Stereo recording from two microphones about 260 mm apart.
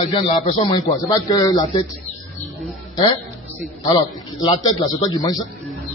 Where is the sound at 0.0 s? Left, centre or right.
Centre.